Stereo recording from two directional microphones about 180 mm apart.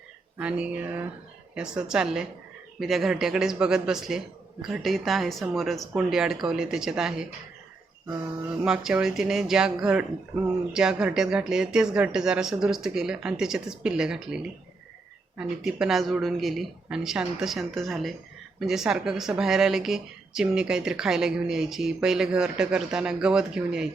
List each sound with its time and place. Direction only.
0.3 s mantra: 5° right (ahead or behind)
1.5 s speech: 5° right (ahead or behind)
8.6 s speech: 5° right (ahead or behind)